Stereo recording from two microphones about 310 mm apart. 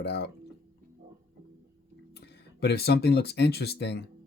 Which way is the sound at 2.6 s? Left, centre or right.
Left.